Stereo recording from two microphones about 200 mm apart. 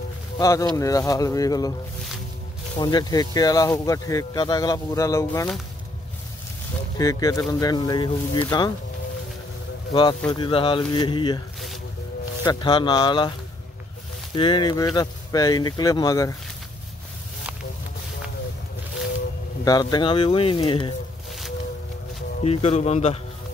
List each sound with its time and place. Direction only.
0.4 s speech: 15° left (ahead or behind)
2.8 s speech: 20° left (ahead or behind)
7.0 s speech: 15° left (ahead or behind)
9.9 s speech: 25° left (ahead or behind)
12.4 s speech: 25° left (ahead or behind)
14.3 s speech: 25° left (ahead or behind)
19.6 s speech: 20° left (ahead or behind)
22.4 s speech: 30° left (ahead or behind)